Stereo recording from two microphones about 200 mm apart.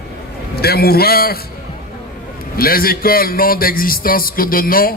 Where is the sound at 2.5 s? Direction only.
45° left (ahead or behind).